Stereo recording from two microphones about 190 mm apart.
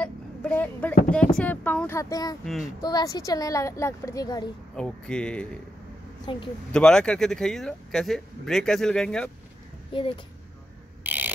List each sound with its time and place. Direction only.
0.0 s speech: 10° left (ahead or behind)
2.4 s speech: centre (ahead or behind)
2.8 s a woman's voice: 20° left (ahead or behind)
4.7 s speech: 5° left (ahead or behind)
6.3 s speech: 25° left (ahead or behind)
6.7 s speech: 5° left (ahead or behind)
9.9 s speech: 25° left (ahead or behind)
11.1 s a sound: 10° right (ahead or behind)